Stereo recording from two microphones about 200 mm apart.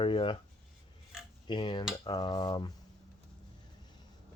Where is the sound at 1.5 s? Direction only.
25° left (ahead or behind).